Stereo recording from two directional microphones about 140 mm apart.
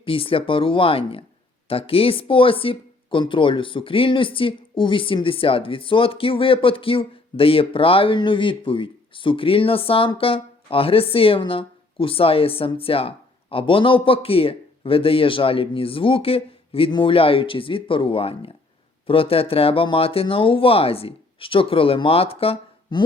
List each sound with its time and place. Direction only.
0.0 s speech: 40° left (ahead or behind)